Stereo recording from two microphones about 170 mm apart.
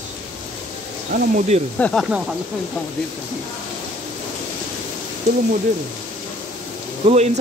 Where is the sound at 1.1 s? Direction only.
40° right (ahead or behind).